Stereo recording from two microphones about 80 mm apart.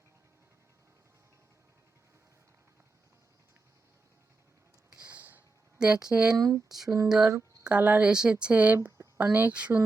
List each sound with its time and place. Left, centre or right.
4.9 s a sound: centre
5.8 s speech: centre
6.3 s speech: right
6.8 s a sound: right
7.1 s speech: centre
7.6 s speech: centre